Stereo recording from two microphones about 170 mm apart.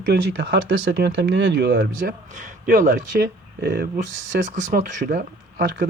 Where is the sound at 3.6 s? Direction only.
60° right (ahead or behind).